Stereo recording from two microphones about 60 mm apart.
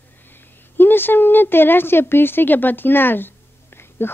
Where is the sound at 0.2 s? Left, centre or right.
Left.